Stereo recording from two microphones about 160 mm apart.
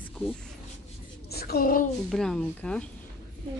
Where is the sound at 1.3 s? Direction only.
75° left (ahead or behind).